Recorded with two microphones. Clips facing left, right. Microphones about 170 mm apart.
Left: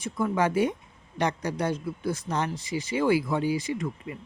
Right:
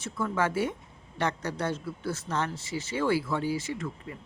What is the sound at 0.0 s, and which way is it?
Speech, 15° left (ahead or behind).